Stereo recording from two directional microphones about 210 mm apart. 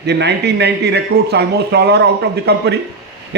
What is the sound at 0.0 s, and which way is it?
A man's voice, 55° right (ahead or behind).